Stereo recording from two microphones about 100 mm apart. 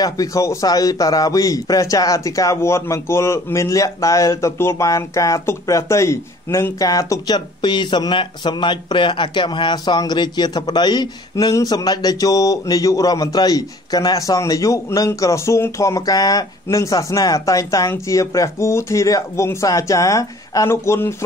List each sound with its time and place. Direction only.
0.0 s speech: 35° left (ahead or behind)